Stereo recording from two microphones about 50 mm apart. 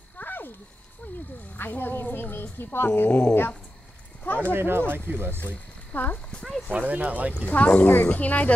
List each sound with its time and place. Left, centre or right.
0.2 s a sound: left
1.6 s a woman's voice: left
3.1 s speech: left
4.2 s speech: left
4.6 s speech: right
5.9 s speech: left
6.7 s speech: right
7.4 s speech: left
7.8 s speech: left